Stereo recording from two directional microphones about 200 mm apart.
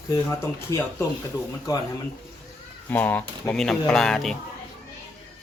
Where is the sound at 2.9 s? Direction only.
10° left (ahead or behind).